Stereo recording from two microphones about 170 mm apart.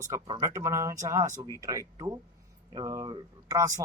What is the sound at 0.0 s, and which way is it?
A man's voice, 20° right (ahead or behind).